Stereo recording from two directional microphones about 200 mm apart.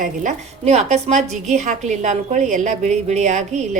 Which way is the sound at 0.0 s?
40° right (ahead or behind).